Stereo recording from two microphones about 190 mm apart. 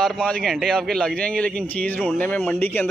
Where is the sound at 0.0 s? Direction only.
Centre (ahead or behind).